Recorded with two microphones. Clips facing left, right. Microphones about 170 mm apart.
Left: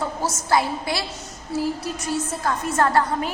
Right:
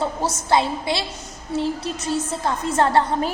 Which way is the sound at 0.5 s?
25° right (ahead or behind).